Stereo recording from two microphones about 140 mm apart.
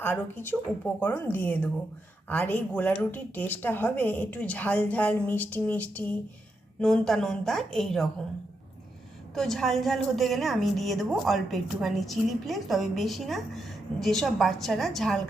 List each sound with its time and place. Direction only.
0.0 s a woman's voice: 15° left (ahead or behind)
9.3 s a woman's voice: centre (ahead or behind)